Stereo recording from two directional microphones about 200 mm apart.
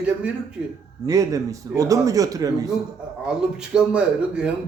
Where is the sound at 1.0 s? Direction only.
15° right (ahead or behind).